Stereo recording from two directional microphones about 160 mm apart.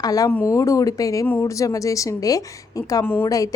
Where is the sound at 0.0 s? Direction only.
20° left (ahead or behind).